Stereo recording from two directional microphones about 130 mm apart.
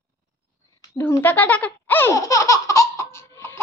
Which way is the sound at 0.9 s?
15° left (ahead or behind).